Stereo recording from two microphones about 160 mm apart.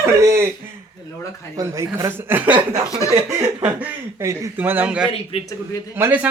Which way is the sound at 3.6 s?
15° right (ahead or behind).